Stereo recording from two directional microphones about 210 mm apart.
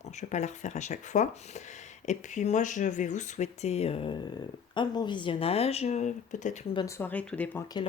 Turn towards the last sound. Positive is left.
turn(degrees=10)  # may be behind; listen again after turning